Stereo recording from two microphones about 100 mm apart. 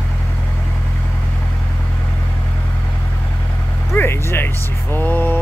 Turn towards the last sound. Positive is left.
turn(degrees=20)  # may be behind; listen again after turning